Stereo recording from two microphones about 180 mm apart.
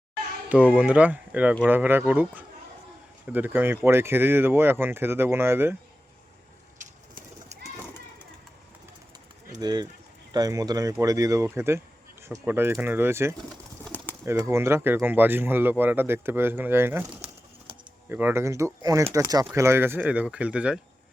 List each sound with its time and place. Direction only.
0.5 s speech: 5° right (ahead or behind)
7.5 s a sound: 40° right (ahead or behind)
9.6 s speech: 20° right (ahead or behind)
13.8 s bird: 10° left (ahead or behind)
14.3 s speech: 15° right (ahead or behind)